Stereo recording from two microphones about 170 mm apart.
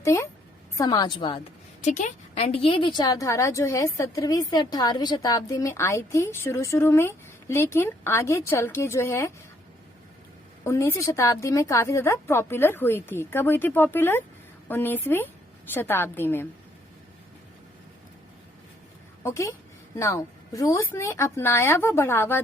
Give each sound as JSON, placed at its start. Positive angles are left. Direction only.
{"t": 0.0, "sound": "a woman's voice", "side_deg": 15}
{"t": 1.8, "sound": "a woman's voice", "side_deg": 45}
{"t": 10.6, "sound": "a woman's voice", "side_deg": 15}
{"t": 19.2, "sound": "a woman's voice", "side_deg": 15}